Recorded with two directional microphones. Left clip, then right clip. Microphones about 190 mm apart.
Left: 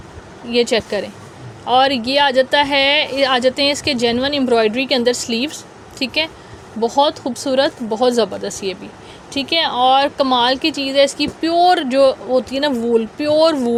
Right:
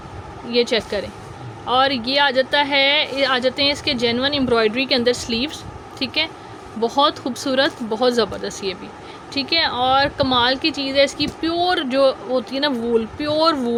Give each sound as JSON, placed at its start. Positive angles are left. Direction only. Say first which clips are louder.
{"t": 0.5, "sound": "speech", "louder": "left 3 dB", "side_deg": 20}
{"t": 6.7, "sound": "speech", "louder": "left 2 dB", "side_deg": 5}